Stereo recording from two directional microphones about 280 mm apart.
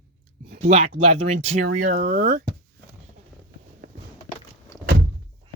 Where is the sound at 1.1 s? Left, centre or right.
Right.